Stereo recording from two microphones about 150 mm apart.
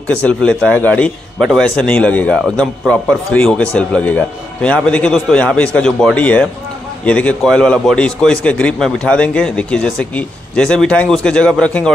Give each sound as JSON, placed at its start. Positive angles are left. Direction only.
{"t": 0.1, "sound": "a man's voice", "side_deg": 5}